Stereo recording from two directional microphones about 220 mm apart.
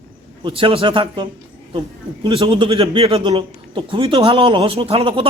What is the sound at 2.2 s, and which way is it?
A man's voice, 20° right (ahead or behind).